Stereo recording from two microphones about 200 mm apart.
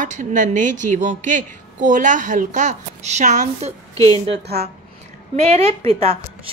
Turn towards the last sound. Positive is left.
turn(degrees=-30)  # may be behind; listen again after turning